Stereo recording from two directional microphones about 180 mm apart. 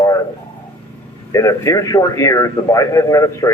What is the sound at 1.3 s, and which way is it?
A man's voice, 15° left (ahead or behind).